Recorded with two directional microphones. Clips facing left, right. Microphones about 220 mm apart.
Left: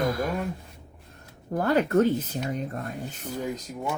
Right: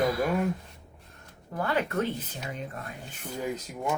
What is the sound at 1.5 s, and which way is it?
Speech, 40° left (ahead or behind).